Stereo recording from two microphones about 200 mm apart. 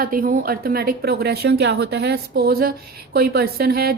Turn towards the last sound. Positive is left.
turn(degrees=-50)  # may be behind; listen again after turning